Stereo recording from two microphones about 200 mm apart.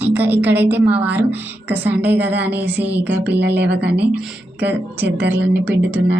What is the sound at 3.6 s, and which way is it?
Speech, 60° right (ahead or behind).